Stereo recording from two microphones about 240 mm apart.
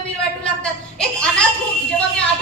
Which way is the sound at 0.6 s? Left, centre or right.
Centre.